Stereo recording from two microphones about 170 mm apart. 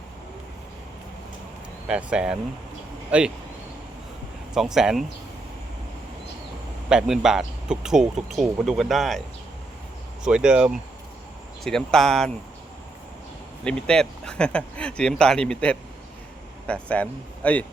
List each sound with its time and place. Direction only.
1.9 s speech: 5° right (ahead or behind)
4.5 s speech: centre (ahead or behind)
6.8 s speech: 5° right (ahead or behind)
10.2 s speech: 5° right (ahead or behind)
13.7 s speech: 5° left (ahead or behind)